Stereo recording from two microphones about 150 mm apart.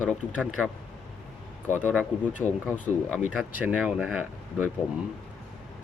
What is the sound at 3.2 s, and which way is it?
Speech, 10° right (ahead or behind).